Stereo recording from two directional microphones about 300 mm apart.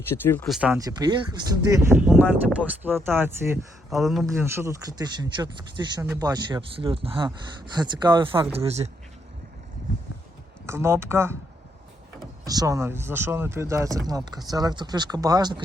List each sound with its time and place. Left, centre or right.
0.1 s speech: centre; by 8.9 s right
10.7 s speech: centre
12.5 s speech: centre